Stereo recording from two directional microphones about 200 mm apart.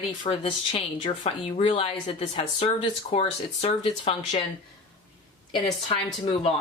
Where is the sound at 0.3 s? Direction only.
25° left (ahead or behind).